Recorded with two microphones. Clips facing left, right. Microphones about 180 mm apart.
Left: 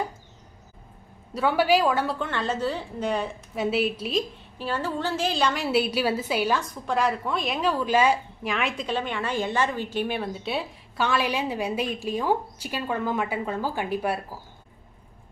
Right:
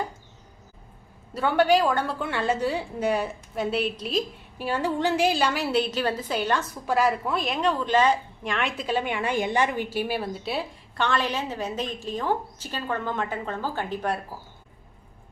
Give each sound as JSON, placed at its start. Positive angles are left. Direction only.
{"t": 1.3, "sound": "a woman's voice", "side_deg": 0}
{"t": 2.2, "sound": "a woman's voice", "side_deg": -10}
{"t": 4.5, "sound": "a woman's voice", "side_deg": -10}
{"t": 6.6, "sound": "a woman's voice", "side_deg": -5}